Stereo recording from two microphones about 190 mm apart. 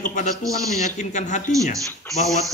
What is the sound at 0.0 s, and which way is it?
A man's voice, 40° left (ahead or behind).